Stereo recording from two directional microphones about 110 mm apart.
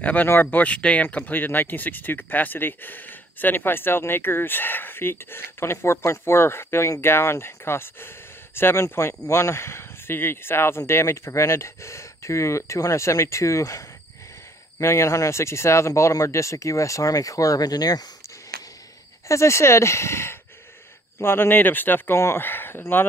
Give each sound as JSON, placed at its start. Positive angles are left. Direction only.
{"t": 0.0, "sound": "speech", "side_deg": 15}
{"t": 19.2, "sound": "speech", "side_deg": 25}